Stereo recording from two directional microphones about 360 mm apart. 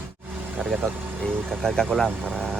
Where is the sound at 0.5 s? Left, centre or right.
Centre.